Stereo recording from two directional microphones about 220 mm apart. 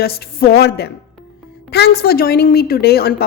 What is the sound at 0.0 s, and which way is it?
Speech, 45° left (ahead or behind).